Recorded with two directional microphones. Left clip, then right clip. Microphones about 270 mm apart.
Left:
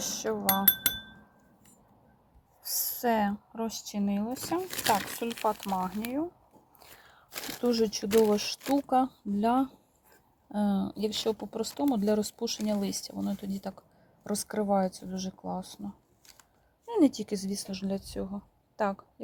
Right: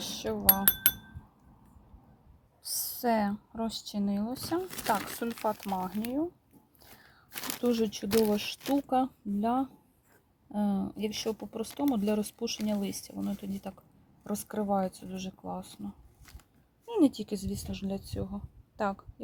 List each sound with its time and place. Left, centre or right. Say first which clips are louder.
0.3 s speech: left 2 dB; centre
2.6 s a sound: left 1 dB; centre
3.8 s speech: left 1 dB; centre
7.6 s speech: left 2 dB; centre
16.8 s a sound: left 1 dB; centre
17.3 s speech: left 3 dB; left
17.7 s speech: left 3 dB; centre